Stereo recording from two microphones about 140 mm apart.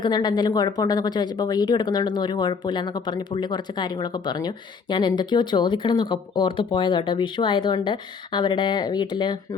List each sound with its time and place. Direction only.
0.0 s speech: 30° left (ahead or behind)